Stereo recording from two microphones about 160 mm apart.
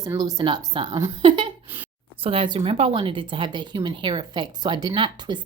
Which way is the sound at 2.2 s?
35° right (ahead or behind).